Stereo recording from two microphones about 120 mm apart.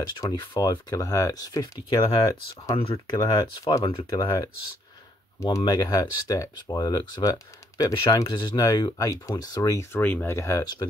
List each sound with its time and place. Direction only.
0.0 s speech: 35° left (ahead or behind)
2.7 s speech: 50° left (ahead or behind)
3.2 s speech: 30° left (ahead or behind)
5.6 s speech: 35° left (ahead or behind)
9.9 s speech: 15° left (ahead or behind)